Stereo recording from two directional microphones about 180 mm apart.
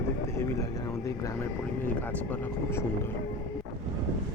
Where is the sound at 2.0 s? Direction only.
10° left (ahead or behind).